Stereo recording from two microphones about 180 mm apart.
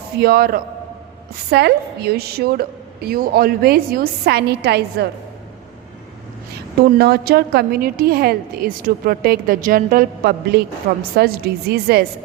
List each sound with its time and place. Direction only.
0.2 s a woman's voice: 60° right (ahead or behind)
7.0 s a woman's voice: 60° right (ahead or behind)